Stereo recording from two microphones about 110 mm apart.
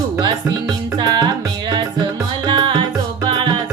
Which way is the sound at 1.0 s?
40° right (ahead or behind).